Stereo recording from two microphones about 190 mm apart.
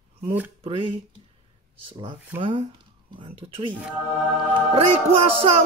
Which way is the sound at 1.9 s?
25° right (ahead or behind).